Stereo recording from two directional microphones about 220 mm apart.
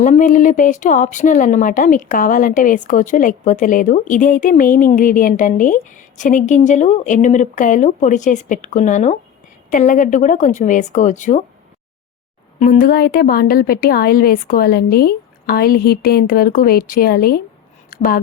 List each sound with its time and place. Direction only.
0.0 s speech: 35° left (ahead or behind)
12.5 s a woman's voice: 40° left (ahead or behind)